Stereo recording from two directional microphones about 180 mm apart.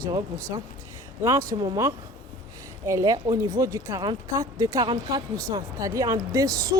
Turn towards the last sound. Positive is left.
turn(degrees=-20)  # may be behind; listen again after turning